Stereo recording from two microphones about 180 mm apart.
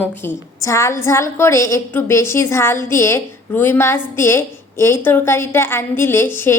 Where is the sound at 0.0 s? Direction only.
10° left (ahead or behind).